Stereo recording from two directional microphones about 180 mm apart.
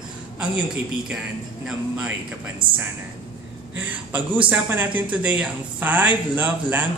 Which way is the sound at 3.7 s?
10° right (ahead or behind).